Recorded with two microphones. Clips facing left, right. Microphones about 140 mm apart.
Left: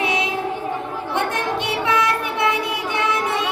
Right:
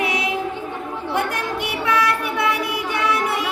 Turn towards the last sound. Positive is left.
turn(degrees=20)  # may be behind; listen again after turning